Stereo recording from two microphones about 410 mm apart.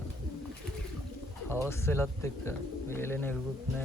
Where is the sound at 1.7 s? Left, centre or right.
Centre.